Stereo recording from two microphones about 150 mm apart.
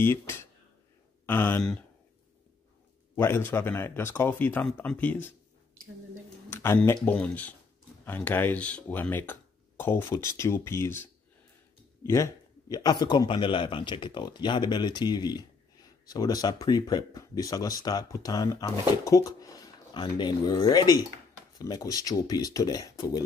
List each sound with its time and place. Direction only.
0.0 s speech: 15° left (ahead or behind)
3.2 s speech: 15° left (ahead or behind)
6.5 s speech: 15° left (ahead or behind)